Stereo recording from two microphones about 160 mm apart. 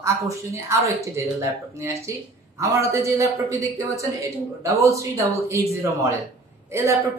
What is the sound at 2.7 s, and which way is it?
A woman's voice, 20° right (ahead or behind).